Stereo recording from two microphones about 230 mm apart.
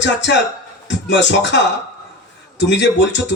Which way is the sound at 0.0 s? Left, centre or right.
Left.